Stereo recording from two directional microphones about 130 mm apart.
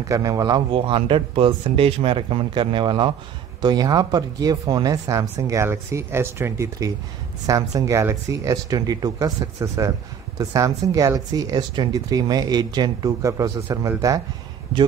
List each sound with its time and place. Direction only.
0.1 s speech: 25° right (ahead or behind)
0.7 s speech: 45° right (ahead or behind); by 14.2 s 25° right (ahead or behind)